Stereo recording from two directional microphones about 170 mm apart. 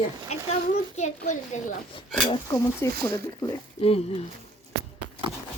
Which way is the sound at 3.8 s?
35° left (ahead or behind).